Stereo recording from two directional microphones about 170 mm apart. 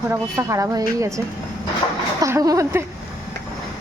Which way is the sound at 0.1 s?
15° right (ahead or behind).